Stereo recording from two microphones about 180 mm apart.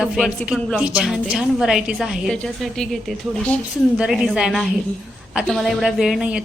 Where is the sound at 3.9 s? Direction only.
5° right (ahead or behind).